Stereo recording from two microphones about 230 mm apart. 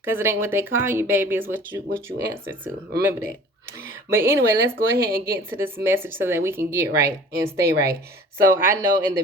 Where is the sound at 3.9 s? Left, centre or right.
Centre.